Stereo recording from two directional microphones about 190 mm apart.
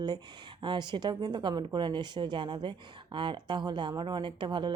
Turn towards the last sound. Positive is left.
turn(degrees=-25)  # may be behind; listen again after turning